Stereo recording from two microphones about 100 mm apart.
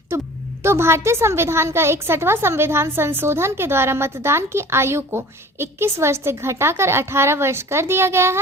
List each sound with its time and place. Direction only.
0.6 s a woman's voice: 25° right (ahead or behind)